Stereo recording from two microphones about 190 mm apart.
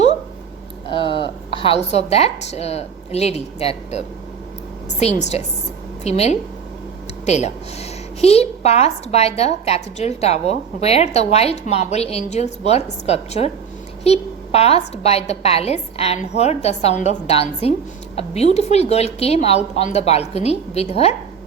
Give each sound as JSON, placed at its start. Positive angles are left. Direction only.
{"t": 0.9, "sound": "a woman's voice", "side_deg": 25}